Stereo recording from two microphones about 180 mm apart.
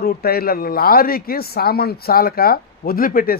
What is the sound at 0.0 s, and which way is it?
Speech, 55° left (ahead or behind).